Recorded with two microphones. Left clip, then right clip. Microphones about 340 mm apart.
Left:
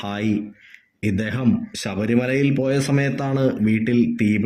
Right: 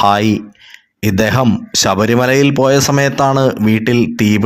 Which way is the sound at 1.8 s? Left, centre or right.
Right.